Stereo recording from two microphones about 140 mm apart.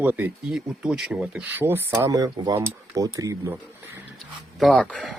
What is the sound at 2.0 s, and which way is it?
Speech, 25° right (ahead or behind).